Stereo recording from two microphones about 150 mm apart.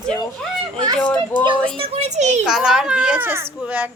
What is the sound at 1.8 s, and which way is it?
Speech, 45° right (ahead or behind).